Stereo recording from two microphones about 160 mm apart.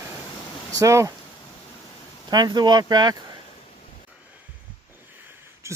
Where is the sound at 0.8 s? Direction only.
20° right (ahead or behind).